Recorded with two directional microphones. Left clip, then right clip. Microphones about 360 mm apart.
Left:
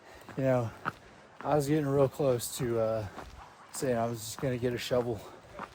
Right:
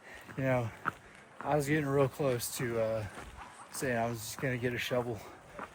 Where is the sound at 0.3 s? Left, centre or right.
Centre.